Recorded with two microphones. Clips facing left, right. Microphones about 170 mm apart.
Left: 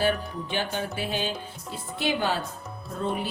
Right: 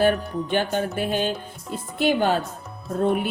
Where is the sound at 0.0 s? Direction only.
50° right (ahead or behind).